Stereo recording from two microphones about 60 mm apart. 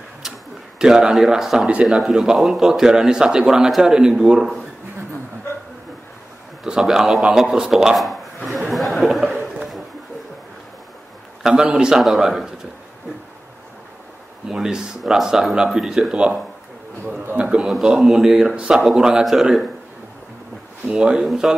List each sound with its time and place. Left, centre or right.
0.7 s speech: centre
6.6 s a man's voice: centre
8.5 s a sound: centre
11.4 s speech: centre
14.5 s speech: centre
17.4 s a man's voice: centre
17.6 s speech: centre
20.9 s speech: centre